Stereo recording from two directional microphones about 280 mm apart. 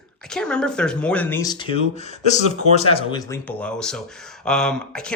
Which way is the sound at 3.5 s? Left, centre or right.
Centre.